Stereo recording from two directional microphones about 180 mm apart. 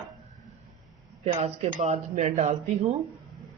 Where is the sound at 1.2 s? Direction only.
35° right (ahead or behind).